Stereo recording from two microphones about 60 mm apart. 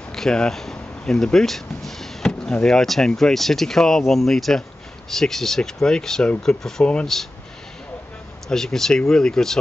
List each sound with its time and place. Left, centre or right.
0.1 s speech: centre
8.5 s speech: centre